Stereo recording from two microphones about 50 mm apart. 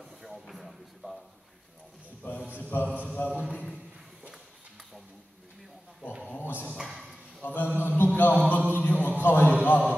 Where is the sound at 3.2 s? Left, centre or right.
Left.